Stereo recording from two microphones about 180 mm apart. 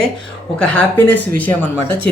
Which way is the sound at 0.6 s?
5° left (ahead or behind).